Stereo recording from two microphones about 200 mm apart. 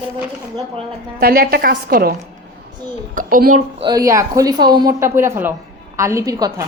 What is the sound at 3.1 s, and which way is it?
Speech, 45° right (ahead or behind).